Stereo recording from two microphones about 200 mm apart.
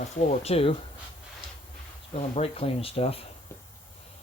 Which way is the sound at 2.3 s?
30° left (ahead or behind).